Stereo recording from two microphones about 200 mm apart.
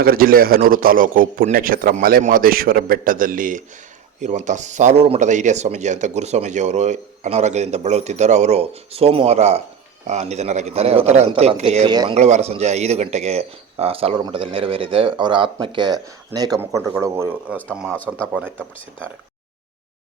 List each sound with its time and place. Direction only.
0.0 s a man's voice: 45° right (ahead or behind); by 17.6 s 10° right (ahead or behind)
17.7 s a man's voice: 5° left (ahead or behind)
18.2 s speech: 10° right (ahead or behind)